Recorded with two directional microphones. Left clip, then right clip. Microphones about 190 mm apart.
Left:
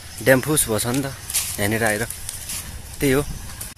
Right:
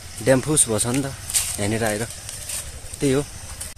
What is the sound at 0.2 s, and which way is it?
Speech, centre (ahead or behind).